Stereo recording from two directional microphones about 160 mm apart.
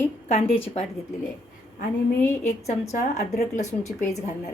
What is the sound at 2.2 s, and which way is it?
A woman's voice, 45° left (ahead or behind).